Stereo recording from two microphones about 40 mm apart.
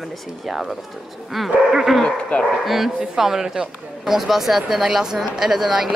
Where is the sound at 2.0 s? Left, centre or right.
Left.